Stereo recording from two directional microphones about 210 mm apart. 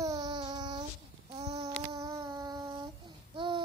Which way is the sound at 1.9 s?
15° right (ahead or behind).